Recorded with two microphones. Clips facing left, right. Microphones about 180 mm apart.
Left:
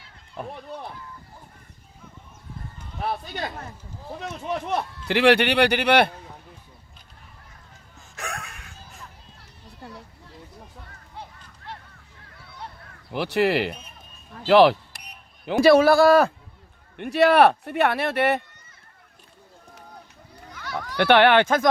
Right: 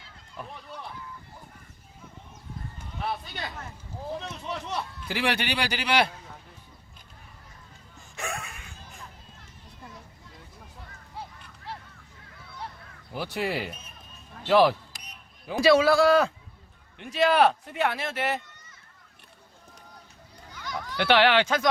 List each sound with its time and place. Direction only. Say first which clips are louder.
0.3 s speech: left 6 dB; 50° left (ahead or behind)
3.0 s speech: left 4 dB; 45° left (ahead or behind)
4.3 s speech: left 7 dB; 55° left (ahead or behind)
8.1 s music: even; centre (ahead or behind)
9.8 s a sound: left 5 dB; 70° left (ahead or behind)
13.1 s speech: left 8 dB; 70° left (ahead or behind)
14.4 s a sound: left 5 dB; 70° left (ahead or behind)
15.6 s speech: left 4 dB; 60° left (ahead or behind)
20.9 s speech: left 5 dB; 55° left (ahead or behind)